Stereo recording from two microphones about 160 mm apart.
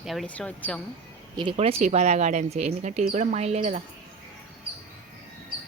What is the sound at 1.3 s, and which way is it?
Speech, 35° right (ahead or behind).